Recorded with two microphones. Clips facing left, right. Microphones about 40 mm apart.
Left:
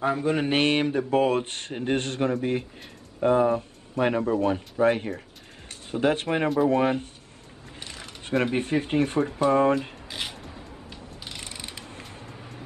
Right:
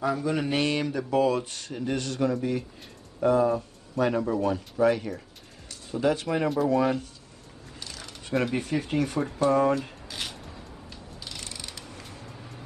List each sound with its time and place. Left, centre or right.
0.0 s speech: left
9.4 s a sound: left
10.9 s mechanisms: left